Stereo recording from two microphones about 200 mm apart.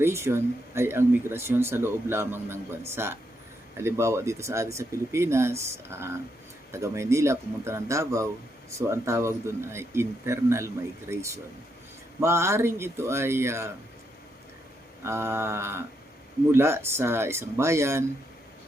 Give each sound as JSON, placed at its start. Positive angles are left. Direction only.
{"t": 0.0, "sound": "speech", "side_deg": -15}
{"t": 15.0, "sound": "speech", "side_deg": -15}